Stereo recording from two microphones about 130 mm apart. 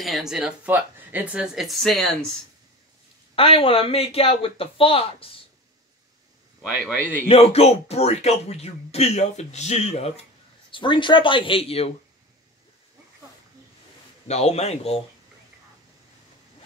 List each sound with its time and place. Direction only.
0.0 s speech: centre (ahead or behind)
3.3 s speech: 45° left (ahead or behind)
7.2 s speech: 50° left (ahead or behind)
10.7 s speech: 40° left (ahead or behind)
14.2 s a man's voice: 55° left (ahead or behind)